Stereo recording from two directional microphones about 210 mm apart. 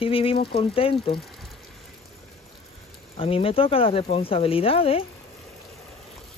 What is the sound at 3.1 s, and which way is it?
Speech, 25° left (ahead or behind).